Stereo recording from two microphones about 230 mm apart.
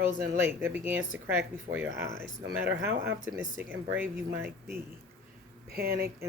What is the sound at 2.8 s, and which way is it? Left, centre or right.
Speech, right.